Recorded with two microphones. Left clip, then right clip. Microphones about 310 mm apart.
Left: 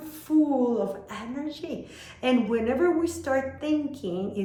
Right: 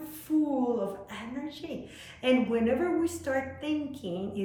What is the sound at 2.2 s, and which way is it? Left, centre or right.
A woman's voice, centre.